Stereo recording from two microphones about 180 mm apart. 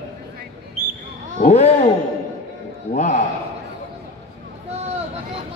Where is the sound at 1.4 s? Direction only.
35° left (ahead or behind).